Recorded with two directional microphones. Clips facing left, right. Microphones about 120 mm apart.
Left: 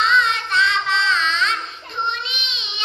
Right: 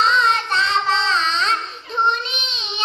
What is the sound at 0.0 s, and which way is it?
Child singing, 35° right (ahead or behind).